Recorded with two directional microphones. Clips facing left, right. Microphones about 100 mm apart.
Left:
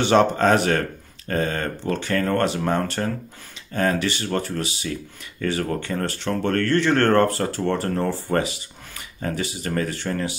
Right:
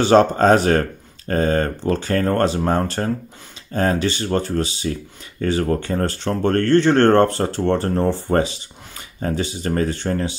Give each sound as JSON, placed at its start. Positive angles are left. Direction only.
{"t": 0.0, "sound": "speech", "side_deg": -35}